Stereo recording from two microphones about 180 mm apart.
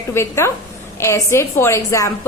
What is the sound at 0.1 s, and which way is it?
A woman's voice, 15° left (ahead or behind).